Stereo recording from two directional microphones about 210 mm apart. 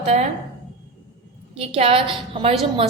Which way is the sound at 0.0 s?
30° right (ahead or behind).